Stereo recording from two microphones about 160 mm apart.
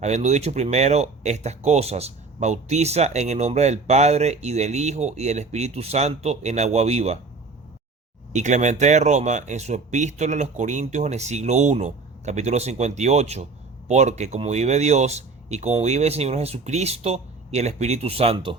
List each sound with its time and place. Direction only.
0.0 s speech: 45° right (ahead or behind)
8.3 s speech: 45° right (ahead or behind)